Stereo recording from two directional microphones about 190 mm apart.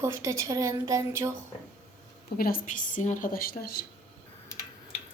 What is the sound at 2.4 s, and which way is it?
A woman's voice, 45° left (ahead or behind).